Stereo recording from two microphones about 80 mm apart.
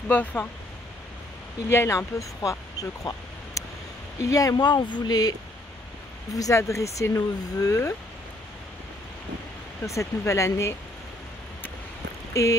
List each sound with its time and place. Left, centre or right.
0.1 s speech: left
1.7 s speech: left
4.6 s speech: left
6.3 s speech: left
9.8 s speech: left
12.4 s speech: left